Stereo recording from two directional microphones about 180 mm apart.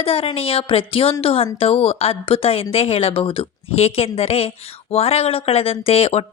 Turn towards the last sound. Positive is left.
turn(degrees=30)  # may be behind; listen again after turning